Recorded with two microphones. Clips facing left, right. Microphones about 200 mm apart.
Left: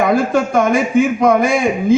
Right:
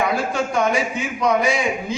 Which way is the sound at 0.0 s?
50° left (ahead or behind).